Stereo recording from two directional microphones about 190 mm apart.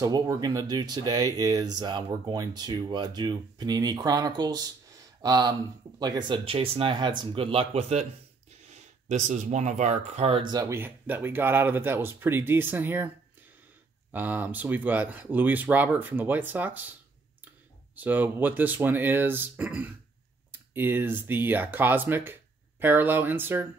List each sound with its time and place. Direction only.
0.0 s speech: 20° right (ahead or behind)
10.5 s speech: 15° right (ahead or behind)
14.1 s speech: 10° right (ahead or behind)
17.9 s speech: 10° right (ahead or behind)